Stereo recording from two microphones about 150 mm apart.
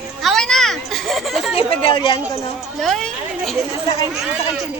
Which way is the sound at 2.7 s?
Centre (ahead or behind).